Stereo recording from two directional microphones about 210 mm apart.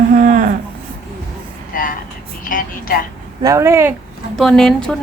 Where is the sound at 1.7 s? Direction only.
40° left (ahead or behind).